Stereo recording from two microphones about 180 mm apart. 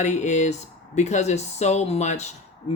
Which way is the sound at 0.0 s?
40° left (ahead or behind).